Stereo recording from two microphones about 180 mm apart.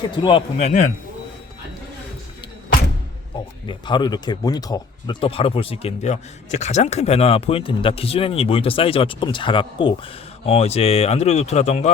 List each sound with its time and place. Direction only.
0.2 s speech: 30° left (ahead or behind)
3.7 s speech: 25° left (ahead or behind)